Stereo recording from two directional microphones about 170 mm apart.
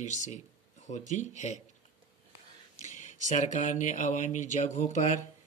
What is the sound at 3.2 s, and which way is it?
Speech, 45° left (ahead or behind).